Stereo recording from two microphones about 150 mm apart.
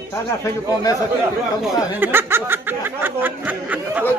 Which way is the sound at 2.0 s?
15° right (ahead or behind).